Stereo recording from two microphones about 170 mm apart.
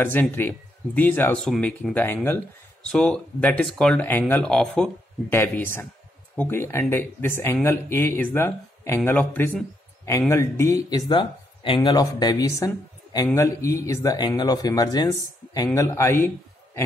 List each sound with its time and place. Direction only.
0.0 s speech: 10° left (ahead or behind)